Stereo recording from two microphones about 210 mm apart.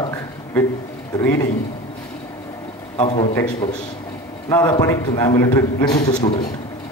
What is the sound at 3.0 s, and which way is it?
Speech, 20° left (ahead or behind).